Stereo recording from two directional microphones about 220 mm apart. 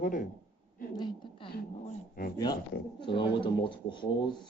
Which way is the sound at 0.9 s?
20° left (ahead or behind).